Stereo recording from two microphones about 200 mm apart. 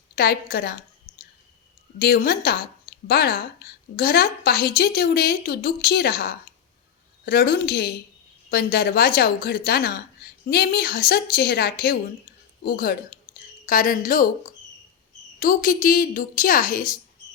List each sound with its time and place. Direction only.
0.2 s a woman's voice: 50° left (ahead or behind)
1.1 s a sound: 25° left (ahead or behind)
2.0 s a woman's voice: 50° left (ahead or behind)